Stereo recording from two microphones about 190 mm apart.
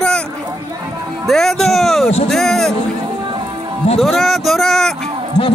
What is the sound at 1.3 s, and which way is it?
A man's voice, centre (ahead or behind).